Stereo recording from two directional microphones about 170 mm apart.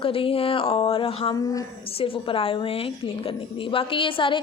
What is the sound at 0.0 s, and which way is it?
A woman's voice, 35° left (ahead or behind).